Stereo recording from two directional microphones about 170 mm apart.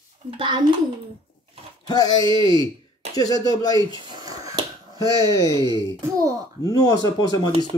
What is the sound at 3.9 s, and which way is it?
Finger snapping, 25° right (ahead or behind).